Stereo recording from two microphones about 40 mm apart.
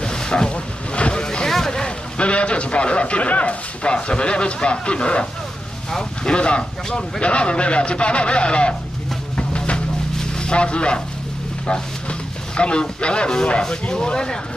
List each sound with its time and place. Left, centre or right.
0.0 s boat: centre
1.5 s speech: centre
9.4 s music: left
10.1 s a sound: centre
11.6 s speech: left